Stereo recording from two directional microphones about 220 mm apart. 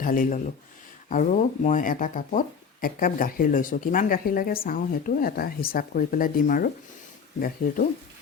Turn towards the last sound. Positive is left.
turn(degrees=40)  # may be behind; listen again after turning